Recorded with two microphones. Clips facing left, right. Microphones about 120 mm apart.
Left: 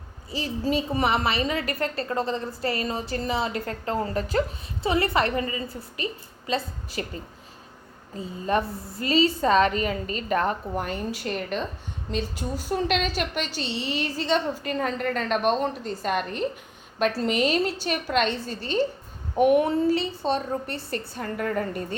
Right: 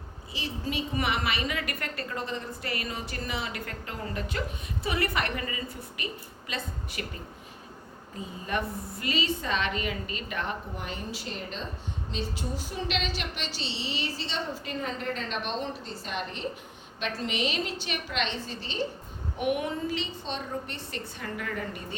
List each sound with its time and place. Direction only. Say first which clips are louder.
0.3 s a woman's voice: left 8 dB; 35° left (ahead or behind)
8.2 s a woman's voice: left 7 dB; 35° left (ahead or behind); by 11.6 s 60° left (ahead or behind)
12.1 s a woman's voice: left 5 dB; 45° left (ahead or behind)